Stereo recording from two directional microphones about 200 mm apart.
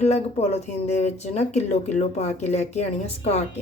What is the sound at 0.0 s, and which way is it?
A woman's voice, 35° left (ahead or behind).